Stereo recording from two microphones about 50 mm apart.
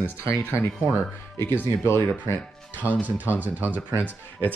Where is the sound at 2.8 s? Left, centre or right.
Right.